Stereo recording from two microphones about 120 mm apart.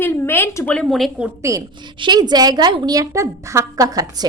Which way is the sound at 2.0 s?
35° right (ahead or behind).